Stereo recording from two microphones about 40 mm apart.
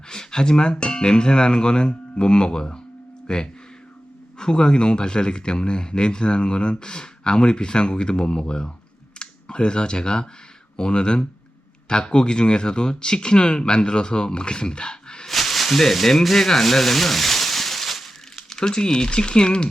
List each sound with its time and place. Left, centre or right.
0.1 s speech: centre
15.3 s speech: centre; by 19.6 s left